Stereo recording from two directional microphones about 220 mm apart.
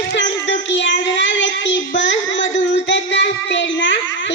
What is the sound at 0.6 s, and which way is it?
Child singing, 55° left (ahead or behind).